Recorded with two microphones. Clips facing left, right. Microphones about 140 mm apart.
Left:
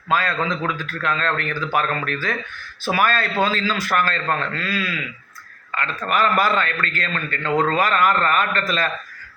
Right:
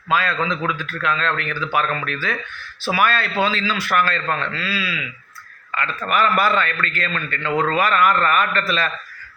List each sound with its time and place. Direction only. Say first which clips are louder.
0.1 s a man's voice: even; 40° left (ahead or behind)
6.1 s a man's voice: even; 40° left (ahead or behind)